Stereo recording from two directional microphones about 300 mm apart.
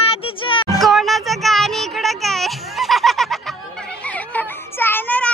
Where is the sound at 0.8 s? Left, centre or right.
Centre.